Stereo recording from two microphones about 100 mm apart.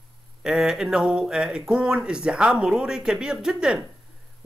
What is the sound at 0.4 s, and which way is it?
Speech, 5° right (ahead or behind).